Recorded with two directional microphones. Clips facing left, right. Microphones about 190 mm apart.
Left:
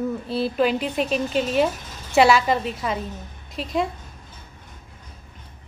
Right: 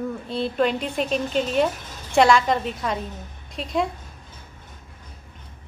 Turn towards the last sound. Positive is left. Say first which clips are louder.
# even
turn(degrees=0)  # may be behind; listen again after turning